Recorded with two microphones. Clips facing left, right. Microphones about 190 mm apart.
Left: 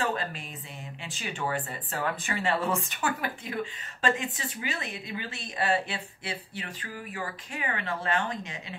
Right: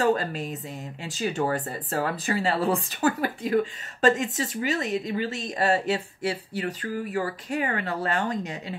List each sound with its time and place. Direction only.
0.0 s speech: 40° right (ahead or behind)